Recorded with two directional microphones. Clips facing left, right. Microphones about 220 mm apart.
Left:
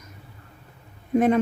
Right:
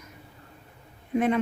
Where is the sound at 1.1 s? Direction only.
45° left (ahead or behind).